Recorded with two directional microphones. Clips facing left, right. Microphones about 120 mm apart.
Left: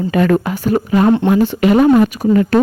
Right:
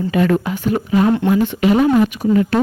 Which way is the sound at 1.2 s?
25° left (ahead or behind).